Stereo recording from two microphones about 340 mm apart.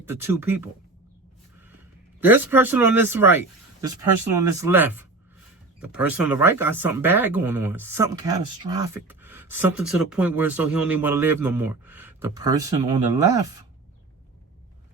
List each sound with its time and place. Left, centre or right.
0.0 s speech: centre
2.2 s speech: centre